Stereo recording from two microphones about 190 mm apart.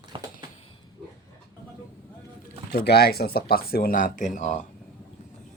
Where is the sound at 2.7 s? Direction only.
60° left (ahead or behind); by 4.6 s 40° left (ahead or behind).